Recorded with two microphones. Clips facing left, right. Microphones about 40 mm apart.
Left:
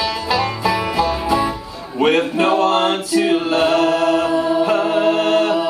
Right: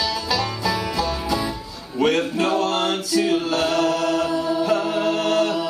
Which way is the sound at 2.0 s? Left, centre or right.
Left.